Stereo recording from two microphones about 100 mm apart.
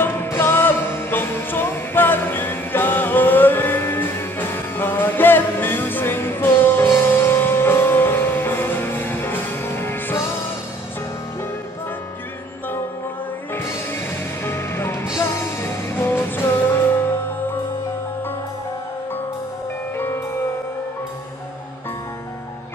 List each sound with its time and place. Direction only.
0.0 s music: 20° left (ahead or behind)
13.5 s music: 25° left (ahead or behind)